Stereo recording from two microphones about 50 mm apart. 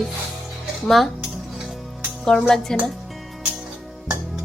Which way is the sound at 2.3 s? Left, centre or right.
Centre.